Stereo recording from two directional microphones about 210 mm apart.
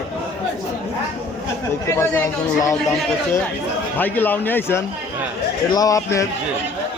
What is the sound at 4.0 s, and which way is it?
Speech, 10° left (ahead or behind).